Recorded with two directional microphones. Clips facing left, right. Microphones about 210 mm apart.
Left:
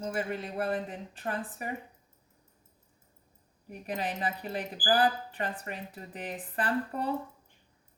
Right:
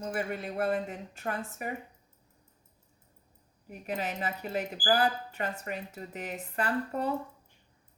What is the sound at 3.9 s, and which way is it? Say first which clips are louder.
Speech: even; 35° left (ahead or behind).